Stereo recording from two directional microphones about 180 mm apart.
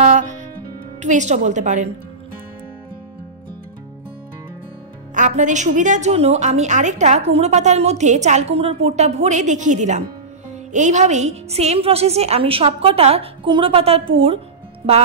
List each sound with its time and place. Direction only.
0.0 s music: 40° right (ahead or behind)
1.0 s a woman's voice: 40° right (ahead or behind)
5.1 s a woman's voice: 45° right (ahead or behind)